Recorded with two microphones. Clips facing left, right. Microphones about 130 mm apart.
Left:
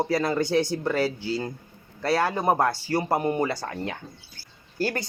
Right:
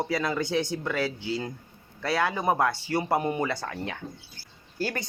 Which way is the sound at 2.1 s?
30° left (ahead or behind).